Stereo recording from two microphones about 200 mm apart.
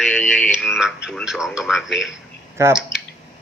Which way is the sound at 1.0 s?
5° right (ahead or behind).